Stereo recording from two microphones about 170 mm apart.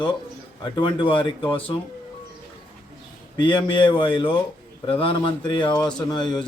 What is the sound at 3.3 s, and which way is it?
A man's voice, 30° left (ahead or behind).